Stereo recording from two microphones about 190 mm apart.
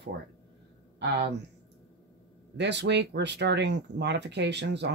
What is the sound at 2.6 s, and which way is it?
Speech, 65° right (ahead or behind).